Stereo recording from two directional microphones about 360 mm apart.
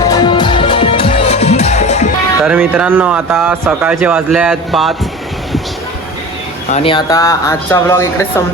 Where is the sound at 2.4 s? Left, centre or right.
Centre.